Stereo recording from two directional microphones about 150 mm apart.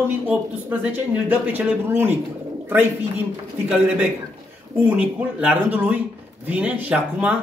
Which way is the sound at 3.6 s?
10° right (ahead or behind).